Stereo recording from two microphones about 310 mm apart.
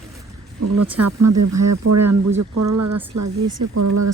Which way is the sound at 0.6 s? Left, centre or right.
Right.